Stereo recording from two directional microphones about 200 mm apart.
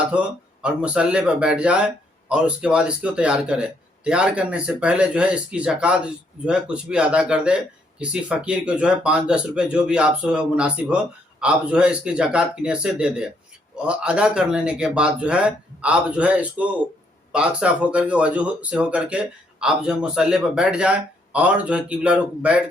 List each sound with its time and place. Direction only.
0.6 s speech: 5° right (ahead or behind)